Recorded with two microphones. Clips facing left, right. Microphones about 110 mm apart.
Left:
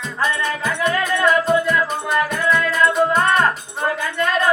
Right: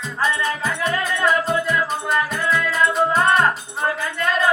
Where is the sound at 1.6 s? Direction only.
Centre (ahead or behind).